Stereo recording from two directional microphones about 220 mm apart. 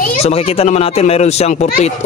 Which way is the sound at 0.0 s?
30° left (ahead or behind).